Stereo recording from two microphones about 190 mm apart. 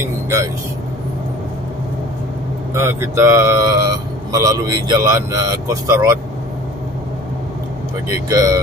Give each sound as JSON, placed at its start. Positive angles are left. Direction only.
{"t": 2.7, "sound": "speech", "side_deg": -15}
{"t": 8.3, "sound": "speech", "side_deg": -20}